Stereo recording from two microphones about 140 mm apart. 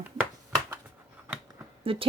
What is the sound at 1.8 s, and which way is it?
Speech, 40° right (ahead or behind).